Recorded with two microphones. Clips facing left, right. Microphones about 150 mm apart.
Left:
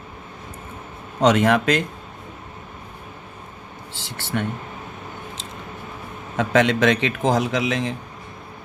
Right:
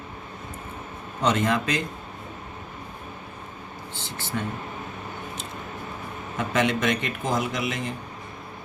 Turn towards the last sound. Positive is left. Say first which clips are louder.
# left 6 dB
turn(degrees=90)